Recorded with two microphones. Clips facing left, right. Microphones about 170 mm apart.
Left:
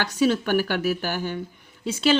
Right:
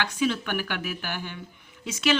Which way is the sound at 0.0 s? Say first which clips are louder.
Left 5 dB; 40° left (ahead or behind).